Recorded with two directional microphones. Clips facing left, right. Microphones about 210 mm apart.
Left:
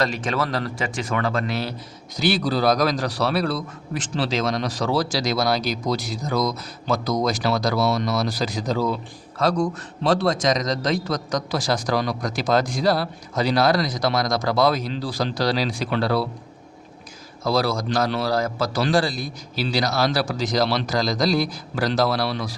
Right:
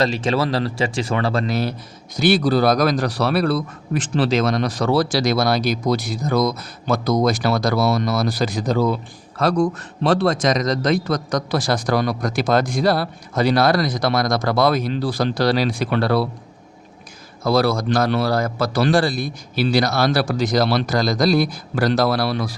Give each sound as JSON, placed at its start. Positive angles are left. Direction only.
{"t": 0.0, "sound": "speech", "side_deg": -25}
{"t": 2.1, "sound": "a man's voice", "side_deg": -50}
{"t": 17.4, "sound": "a man's voice", "side_deg": -60}